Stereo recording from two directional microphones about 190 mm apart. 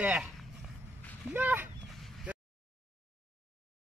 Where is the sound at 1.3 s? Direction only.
10° right (ahead or behind).